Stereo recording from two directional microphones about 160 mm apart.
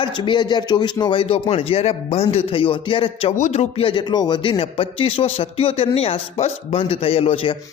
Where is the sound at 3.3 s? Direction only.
45° left (ahead or behind).